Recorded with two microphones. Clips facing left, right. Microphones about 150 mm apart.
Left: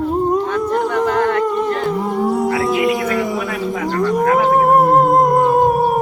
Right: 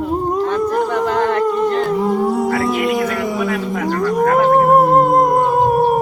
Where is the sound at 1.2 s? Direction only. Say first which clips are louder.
Right 1 dB; centre (ahead or behind).